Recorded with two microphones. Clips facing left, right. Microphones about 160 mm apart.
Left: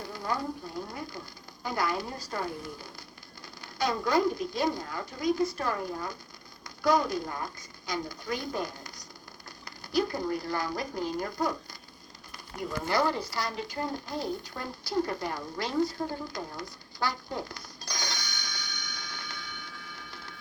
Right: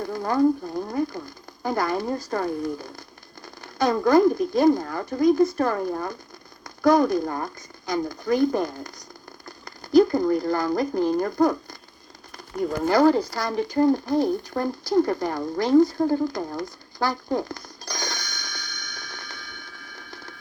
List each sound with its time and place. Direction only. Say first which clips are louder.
0.0 s frying: right 7 dB; 50° right (ahead or behind)
0.9 s speech: right 13 dB; 45° right (ahead or behind)
3.6 s speech: right 8 dB; 50° right (ahead or behind)
12.8 s speech: right 10 dB; 45° right (ahead or behind)